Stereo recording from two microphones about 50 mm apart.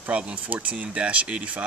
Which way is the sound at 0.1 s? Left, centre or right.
Right.